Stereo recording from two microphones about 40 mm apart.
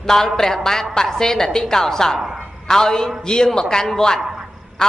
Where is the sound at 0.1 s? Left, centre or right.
Centre.